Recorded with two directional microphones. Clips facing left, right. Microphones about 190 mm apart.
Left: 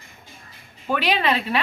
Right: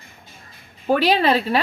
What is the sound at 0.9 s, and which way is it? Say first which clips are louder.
Speech: right 5 dB; 35° right (ahead or behind).